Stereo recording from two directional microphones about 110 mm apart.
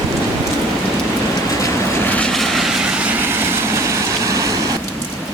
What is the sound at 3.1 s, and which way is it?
Vehicle, 20° right (ahead or behind).